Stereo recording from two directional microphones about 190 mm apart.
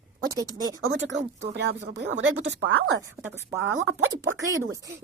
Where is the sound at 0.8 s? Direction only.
85° right.